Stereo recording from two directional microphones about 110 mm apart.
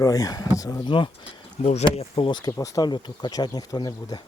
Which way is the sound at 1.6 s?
80° left.